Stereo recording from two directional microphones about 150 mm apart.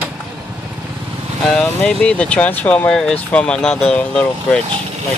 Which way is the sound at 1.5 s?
5° left (ahead or behind).